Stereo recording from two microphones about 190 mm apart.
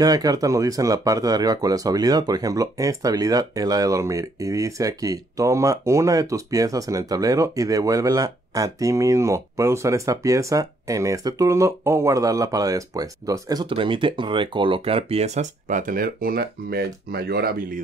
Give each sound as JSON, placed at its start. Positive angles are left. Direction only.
{"t": 0.0, "sound": "speech", "side_deg": -20}